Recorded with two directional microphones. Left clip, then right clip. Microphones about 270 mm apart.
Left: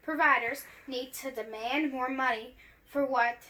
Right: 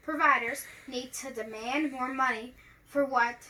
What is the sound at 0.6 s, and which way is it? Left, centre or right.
Speech, centre.